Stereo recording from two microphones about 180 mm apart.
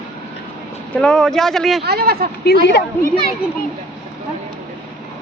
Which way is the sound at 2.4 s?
65° left (ahead or behind).